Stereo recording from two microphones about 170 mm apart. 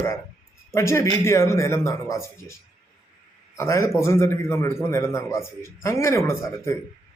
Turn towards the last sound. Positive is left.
turn(degrees=15)  # may be behind; listen again after turning